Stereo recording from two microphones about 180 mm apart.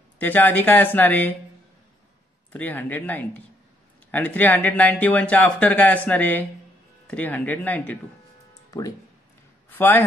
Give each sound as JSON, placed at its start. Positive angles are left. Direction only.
{"t": 0.2, "sound": "speech", "side_deg": 10}
{"t": 2.5, "sound": "speech", "side_deg": 10}
{"t": 8.6, "sound": "music", "side_deg": 20}
{"t": 9.7, "sound": "a man's voice", "side_deg": 10}